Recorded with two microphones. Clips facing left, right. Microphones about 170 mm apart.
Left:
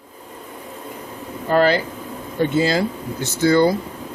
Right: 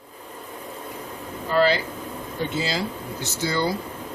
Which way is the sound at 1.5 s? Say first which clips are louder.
Left 4 dB; 55° left (ahead or behind).